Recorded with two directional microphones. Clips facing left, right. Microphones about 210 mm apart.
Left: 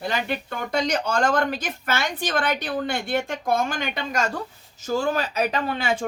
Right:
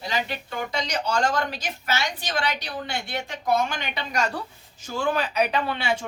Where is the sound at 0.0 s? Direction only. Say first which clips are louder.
Left 3 dB; 55° left (ahead or behind).